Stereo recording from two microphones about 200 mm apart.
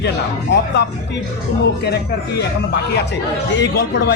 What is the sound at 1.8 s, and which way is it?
Speech, 55° left (ahead or behind).